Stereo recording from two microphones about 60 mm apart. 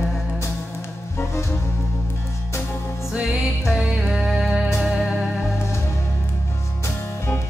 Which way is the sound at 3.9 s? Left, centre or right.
Centre.